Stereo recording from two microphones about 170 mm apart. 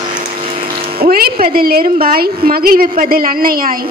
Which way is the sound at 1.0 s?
60° right (ahead or behind).